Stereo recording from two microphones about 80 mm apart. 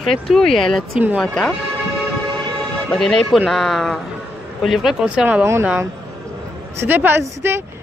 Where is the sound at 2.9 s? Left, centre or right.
Centre.